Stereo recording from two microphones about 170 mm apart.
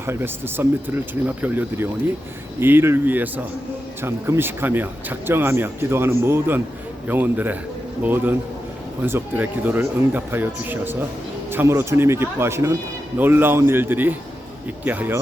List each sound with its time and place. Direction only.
0.0 s speech: 15° right (ahead or behind)